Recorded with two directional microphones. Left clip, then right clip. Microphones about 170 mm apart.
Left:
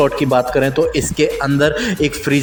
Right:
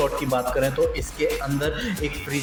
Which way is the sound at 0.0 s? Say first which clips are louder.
Left 9 dB; 45° left (ahead or behind).